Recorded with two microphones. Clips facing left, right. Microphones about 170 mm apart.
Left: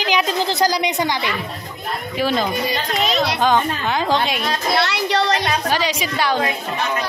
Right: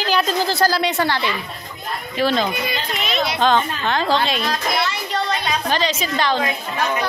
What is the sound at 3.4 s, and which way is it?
A woman's voice, 10° left (ahead or behind).